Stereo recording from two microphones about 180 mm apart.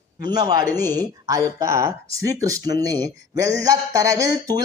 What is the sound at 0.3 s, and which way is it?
A man's voice, 20° right (ahead or behind).